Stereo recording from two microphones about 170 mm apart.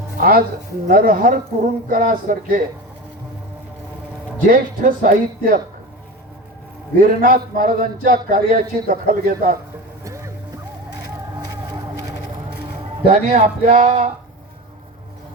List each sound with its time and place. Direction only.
0.2 s speech: 60° right (ahead or behind)
4.4 s speech: 55° right (ahead or behind)
6.9 s speech: 55° right (ahead or behind)
10.0 s music: 15° right (ahead or behind)
13.1 s speech: 40° right (ahead or behind)